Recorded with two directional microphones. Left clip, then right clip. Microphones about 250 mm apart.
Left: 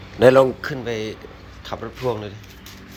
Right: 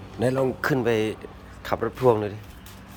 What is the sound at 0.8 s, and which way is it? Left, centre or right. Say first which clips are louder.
A woman's voice: right 3 dB; centre.